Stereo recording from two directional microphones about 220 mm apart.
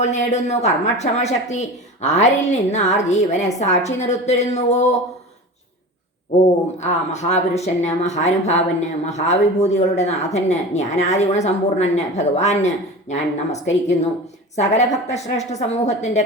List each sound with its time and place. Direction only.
0.0 s speech: 30° left (ahead or behind)
6.7 s speech: 30° left (ahead or behind)